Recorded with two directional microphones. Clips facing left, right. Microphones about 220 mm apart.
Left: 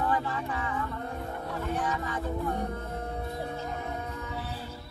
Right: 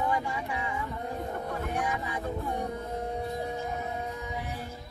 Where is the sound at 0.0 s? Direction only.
15° right (ahead or behind).